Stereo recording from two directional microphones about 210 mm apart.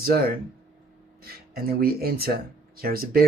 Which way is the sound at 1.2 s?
45° right (ahead or behind).